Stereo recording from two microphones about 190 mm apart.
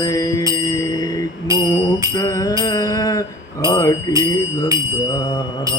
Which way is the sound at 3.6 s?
20° left (ahead or behind).